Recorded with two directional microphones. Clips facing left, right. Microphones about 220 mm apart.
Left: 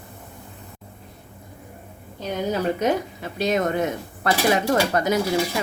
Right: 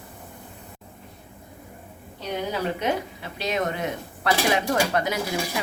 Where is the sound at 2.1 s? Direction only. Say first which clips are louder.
Left 3 dB; 45° left (ahead or behind).